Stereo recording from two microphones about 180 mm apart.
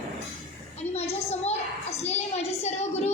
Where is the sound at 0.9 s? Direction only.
35° left (ahead or behind).